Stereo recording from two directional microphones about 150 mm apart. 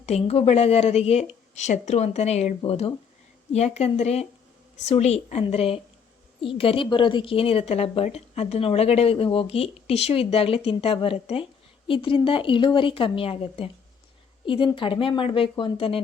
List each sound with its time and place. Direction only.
0.0 s a woman's voice: 45° left (ahead or behind)